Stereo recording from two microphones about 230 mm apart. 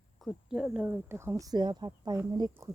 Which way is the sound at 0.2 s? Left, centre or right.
Centre.